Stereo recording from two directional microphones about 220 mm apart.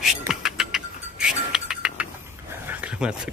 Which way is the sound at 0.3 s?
Centre (ahead or behind).